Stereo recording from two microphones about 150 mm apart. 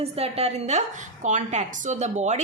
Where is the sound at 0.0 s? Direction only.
40° right (ahead or behind).